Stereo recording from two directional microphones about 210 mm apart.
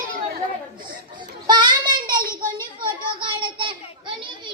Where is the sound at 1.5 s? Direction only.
20° right (ahead or behind).